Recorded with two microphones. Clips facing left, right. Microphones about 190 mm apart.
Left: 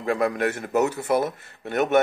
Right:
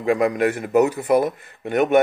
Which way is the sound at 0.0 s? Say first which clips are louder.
Right 4 dB; 15° right (ahead or behind).